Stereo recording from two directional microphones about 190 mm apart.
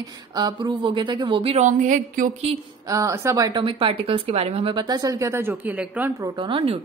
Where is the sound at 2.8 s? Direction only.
15° right (ahead or behind).